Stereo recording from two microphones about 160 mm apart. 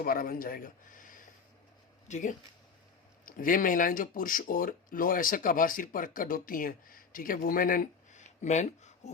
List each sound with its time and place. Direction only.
0.0 s a man's voice: 65° left (ahead or behind); by 2.3 s 45° left (ahead or behind)
3.2 s speech: 60° left (ahead or behind)